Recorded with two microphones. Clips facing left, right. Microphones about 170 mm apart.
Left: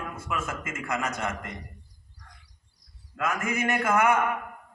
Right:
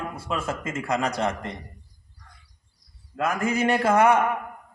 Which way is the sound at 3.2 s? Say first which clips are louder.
Right 4 dB; 30° right (ahead or behind).